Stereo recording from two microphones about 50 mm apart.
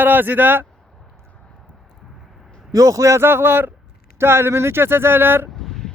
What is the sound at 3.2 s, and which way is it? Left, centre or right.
Speech, right.